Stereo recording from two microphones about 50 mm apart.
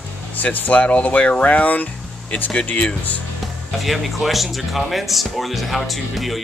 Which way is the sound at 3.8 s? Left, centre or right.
Centre.